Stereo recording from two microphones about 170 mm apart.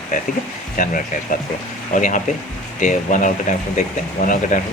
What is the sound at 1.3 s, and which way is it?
Speech, 55° left (ahead or behind).